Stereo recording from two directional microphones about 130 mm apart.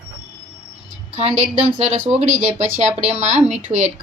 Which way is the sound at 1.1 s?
55° right (ahead or behind).